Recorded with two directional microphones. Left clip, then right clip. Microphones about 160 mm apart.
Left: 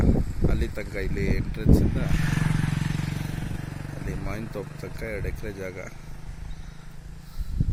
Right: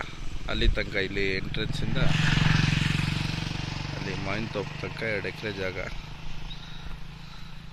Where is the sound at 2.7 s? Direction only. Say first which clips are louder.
Right 5 dB; 40° left (ahead or behind); by 3.9 s 60° left (ahead or behind).